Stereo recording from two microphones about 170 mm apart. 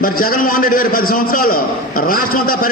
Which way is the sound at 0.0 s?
55° left (ahead or behind).